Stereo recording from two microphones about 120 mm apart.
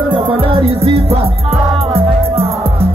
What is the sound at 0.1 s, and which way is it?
Music, 45° right (ahead or behind).